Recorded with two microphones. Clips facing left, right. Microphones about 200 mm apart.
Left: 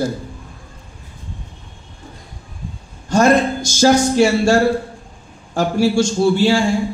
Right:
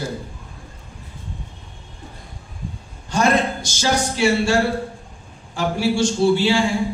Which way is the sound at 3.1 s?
45° left (ahead or behind).